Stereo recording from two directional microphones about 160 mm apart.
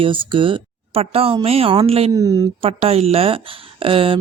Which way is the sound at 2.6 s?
40° right (ahead or behind).